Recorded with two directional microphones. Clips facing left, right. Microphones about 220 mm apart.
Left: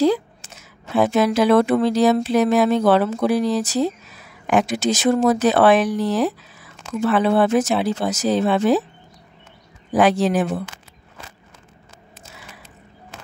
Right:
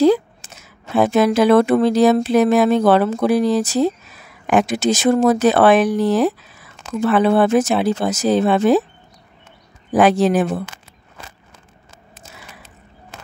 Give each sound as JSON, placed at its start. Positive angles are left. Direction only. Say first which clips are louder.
{"t": 0.0, "sound": "a sound", "louder": "right 4 dB", "side_deg": -55}
{"t": 0.9, "sound": "speech", "louder": "right 2 dB", "side_deg": -55}
{"t": 9.9, "sound": "speech", "louder": "right 3 dB", "side_deg": -55}